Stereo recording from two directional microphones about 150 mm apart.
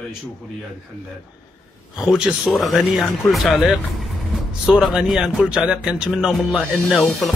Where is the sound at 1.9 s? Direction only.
5° right (ahead or behind).